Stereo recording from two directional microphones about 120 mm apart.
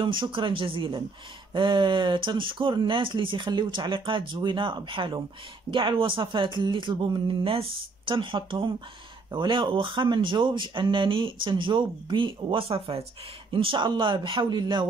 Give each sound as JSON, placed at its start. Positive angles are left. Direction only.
{"t": 0.0, "sound": "speech", "side_deg": -45}